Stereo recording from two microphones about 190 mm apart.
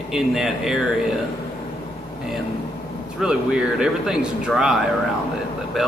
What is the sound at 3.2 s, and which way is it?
Speech, 5° right (ahead or behind).